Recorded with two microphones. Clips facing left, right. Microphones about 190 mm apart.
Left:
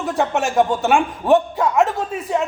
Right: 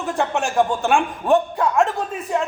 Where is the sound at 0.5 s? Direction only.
20° left (ahead or behind).